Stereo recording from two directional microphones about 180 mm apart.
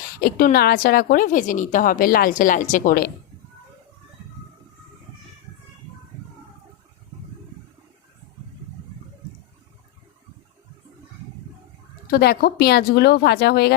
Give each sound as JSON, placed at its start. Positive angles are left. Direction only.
{"t": 0.2, "sound": "speech", "side_deg": 55}
{"t": 12.1, "sound": "speech", "side_deg": 60}